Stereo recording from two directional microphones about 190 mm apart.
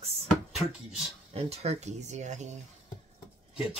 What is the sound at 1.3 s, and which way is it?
Speech, 30° right (ahead or behind).